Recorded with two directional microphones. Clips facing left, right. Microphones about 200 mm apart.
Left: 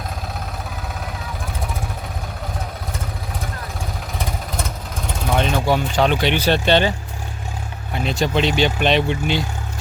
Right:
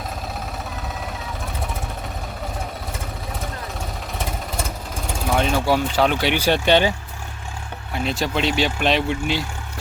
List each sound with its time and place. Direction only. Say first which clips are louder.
4.2 s vehicle: even; 5° right (ahead or behind)
5.7 s speech: left 2 dB; 5° right (ahead or behind)
8.0 s speech: left 3 dB; centre (ahead or behind)